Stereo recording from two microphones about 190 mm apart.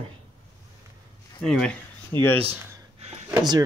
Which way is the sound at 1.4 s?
5° left (ahead or behind).